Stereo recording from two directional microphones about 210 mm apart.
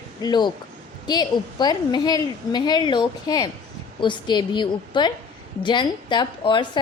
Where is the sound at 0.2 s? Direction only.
20° left (ahead or behind).